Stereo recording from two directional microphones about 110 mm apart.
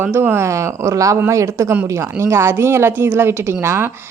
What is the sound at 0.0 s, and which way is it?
Speech, 20° right (ahead or behind).